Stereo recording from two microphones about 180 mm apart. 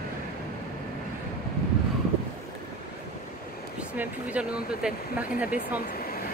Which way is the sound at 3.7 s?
10° right (ahead or behind).